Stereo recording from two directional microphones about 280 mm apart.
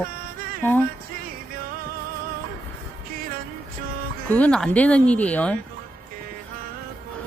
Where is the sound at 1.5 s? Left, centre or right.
Right.